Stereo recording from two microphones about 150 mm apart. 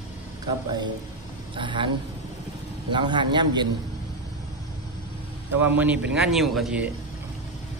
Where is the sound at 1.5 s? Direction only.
35° right (ahead or behind).